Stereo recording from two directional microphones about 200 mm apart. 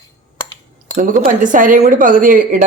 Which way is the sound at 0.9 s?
40° right (ahead or behind).